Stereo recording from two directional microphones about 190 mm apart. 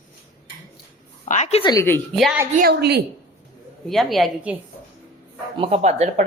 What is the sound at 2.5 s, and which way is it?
Speech, 55° right (ahead or behind).